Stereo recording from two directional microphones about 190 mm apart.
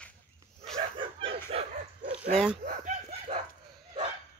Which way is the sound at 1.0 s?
30° right (ahead or behind).